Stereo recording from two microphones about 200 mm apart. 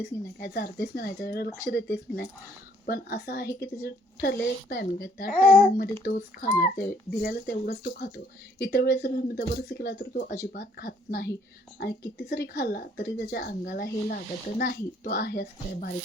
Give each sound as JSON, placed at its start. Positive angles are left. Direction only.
{"t": 0.0, "sound": "speech", "side_deg": 50}